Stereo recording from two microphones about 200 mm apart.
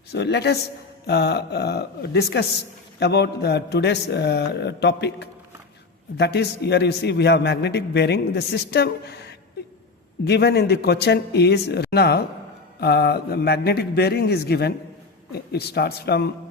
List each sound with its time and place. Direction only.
0.1 s a man's voice: 55° left (ahead or behind)